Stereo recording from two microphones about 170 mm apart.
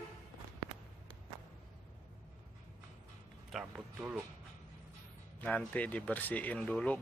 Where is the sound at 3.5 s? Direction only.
5° right (ahead or behind).